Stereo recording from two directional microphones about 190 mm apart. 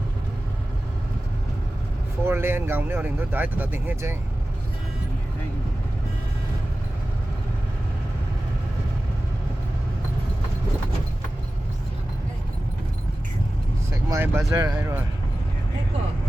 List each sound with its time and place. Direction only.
2.2 s speech: 10° right (ahead or behind)
14.1 s speech: 10° right (ahead or behind)